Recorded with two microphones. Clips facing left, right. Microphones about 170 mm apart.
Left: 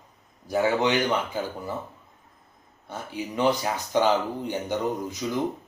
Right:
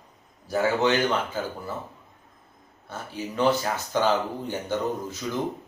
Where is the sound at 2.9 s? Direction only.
15° left (ahead or behind).